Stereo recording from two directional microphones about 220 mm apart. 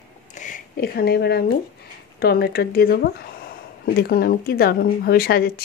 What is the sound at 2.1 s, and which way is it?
Speech, 45° left (ahead or behind).